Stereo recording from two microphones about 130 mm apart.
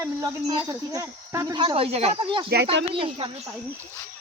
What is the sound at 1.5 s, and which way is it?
Speech, 45° right (ahead or behind).